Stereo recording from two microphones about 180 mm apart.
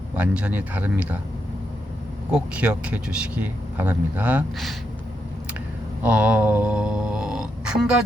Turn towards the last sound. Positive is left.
turn(degrees=-5)  # may be behind; listen again after turning